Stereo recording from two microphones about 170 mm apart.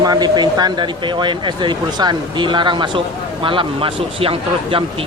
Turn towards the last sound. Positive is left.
turn(degrees=-30)  # may be behind; listen again after turning